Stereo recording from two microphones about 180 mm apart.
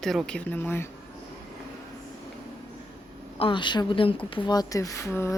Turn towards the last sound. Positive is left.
turn(degrees=15)  # may be behind; listen again after turning